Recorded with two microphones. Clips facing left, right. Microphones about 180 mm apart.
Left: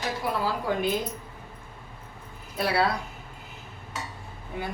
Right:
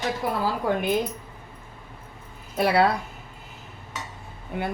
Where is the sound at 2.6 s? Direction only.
55° right (ahead or behind).